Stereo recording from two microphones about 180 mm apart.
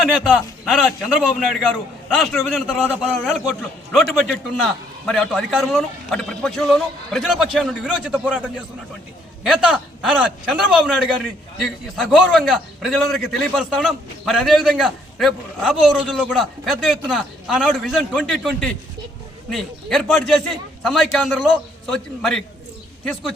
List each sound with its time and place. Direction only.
0.0 s a man's voice: centre (ahead or behind)